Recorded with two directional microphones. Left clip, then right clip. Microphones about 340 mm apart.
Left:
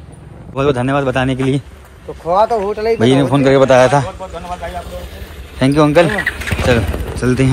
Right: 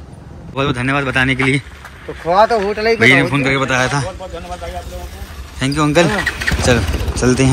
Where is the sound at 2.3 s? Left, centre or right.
Right.